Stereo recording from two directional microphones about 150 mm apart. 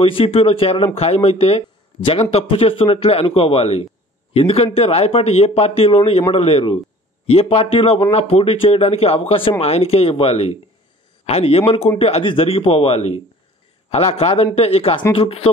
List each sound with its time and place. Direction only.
0.0 s a man's voice: 40° left (ahead or behind)